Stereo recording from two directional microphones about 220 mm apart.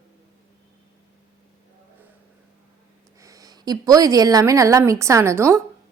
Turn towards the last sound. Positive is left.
turn(degrees=-10)  # may be behind; listen again after turning